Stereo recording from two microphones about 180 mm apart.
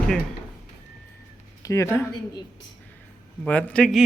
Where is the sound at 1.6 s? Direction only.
15° left (ahead or behind).